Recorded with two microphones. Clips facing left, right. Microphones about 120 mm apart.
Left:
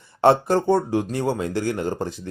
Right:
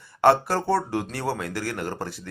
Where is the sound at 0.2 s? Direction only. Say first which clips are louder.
Left 2 dB; 20° left (ahead or behind).